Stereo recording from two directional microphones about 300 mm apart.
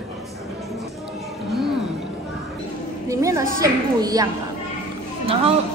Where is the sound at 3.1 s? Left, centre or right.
Centre.